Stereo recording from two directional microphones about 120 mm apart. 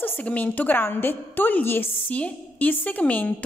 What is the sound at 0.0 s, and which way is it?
A woman's voice, 15° left (ahead or behind).